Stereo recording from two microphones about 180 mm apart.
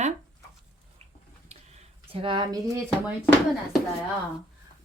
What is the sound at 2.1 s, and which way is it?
Speech, 30° right (ahead or behind).